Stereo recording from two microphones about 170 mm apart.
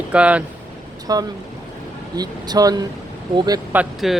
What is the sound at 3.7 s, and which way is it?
Speech, 10° right (ahead or behind).